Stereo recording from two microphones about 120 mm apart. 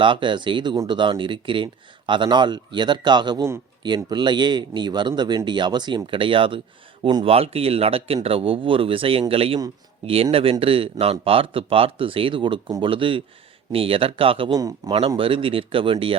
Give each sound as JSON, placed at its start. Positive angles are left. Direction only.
{"t": 0.0, "sound": "speech", "side_deg": -45}
{"t": 7.3, "sound": "speech", "side_deg": -55}
{"t": 14.5, "sound": "speech", "side_deg": -35}
{"t": 15.2, "sound": "speech", "side_deg": -50}